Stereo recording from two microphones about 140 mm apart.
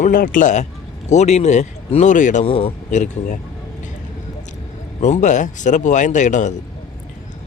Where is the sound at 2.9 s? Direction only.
65° left (ahead or behind).